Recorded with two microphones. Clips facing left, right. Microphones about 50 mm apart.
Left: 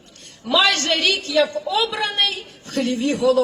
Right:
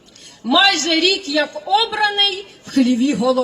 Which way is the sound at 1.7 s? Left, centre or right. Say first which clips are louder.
Right 7 dB; right.